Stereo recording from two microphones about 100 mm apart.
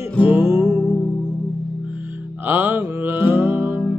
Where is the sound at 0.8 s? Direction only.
20° left (ahead or behind).